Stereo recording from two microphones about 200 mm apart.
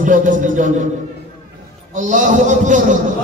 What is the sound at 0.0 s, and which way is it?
Speech, 40° right (ahead or behind).